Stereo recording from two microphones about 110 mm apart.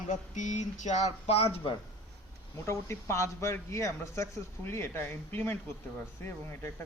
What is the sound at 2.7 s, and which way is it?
Speech, 25° left (ahead or behind).